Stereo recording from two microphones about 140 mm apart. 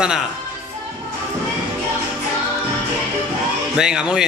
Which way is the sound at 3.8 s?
5° right (ahead or behind).